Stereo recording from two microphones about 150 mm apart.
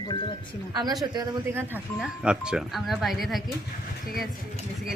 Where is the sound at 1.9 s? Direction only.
5° right (ahead or behind).